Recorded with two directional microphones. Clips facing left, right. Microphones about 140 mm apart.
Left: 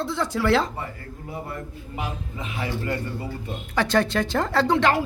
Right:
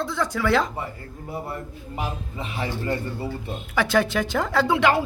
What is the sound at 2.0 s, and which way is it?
A man's voice, 30° right (ahead or behind).